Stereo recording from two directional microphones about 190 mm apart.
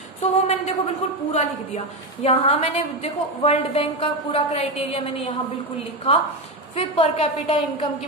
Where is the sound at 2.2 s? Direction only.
30° left (ahead or behind).